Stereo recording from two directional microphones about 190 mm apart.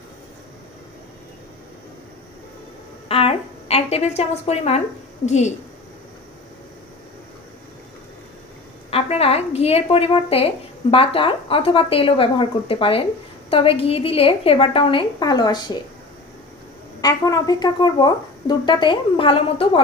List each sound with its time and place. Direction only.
3.1 s a woman's voice: 30° left (ahead or behind)
8.9 s a woman's voice: 30° left (ahead or behind)
17.0 s a woman's voice: 20° left (ahead or behind)